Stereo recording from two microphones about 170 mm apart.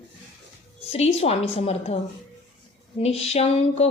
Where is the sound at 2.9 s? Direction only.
35° left (ahead or behind).